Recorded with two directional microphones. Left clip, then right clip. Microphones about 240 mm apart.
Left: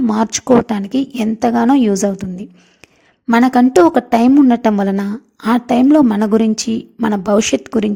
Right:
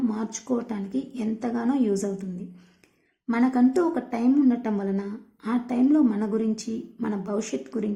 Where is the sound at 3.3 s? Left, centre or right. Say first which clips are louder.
Left 11 dB; left.